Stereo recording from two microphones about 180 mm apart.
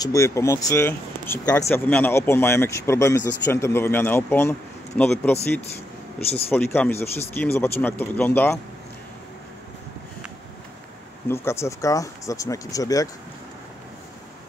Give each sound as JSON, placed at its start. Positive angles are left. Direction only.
{"t": 0.0, "sound": "speech", "side_deg": 15}
{"t": 11.2, "sound": "speech", "side_deg": 15}